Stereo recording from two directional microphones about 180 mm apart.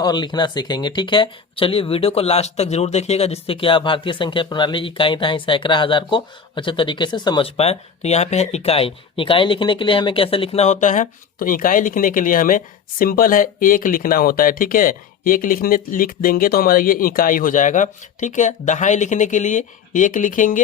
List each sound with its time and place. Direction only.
0.0 s speech: 25° left (ahead or behind); by 20.6 s 45° left (ahead or behind)